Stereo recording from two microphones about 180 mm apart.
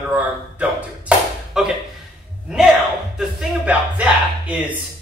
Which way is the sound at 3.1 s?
5° right (ahead or behind).